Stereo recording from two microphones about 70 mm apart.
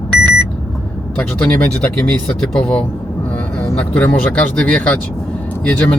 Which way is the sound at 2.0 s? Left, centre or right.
Centre.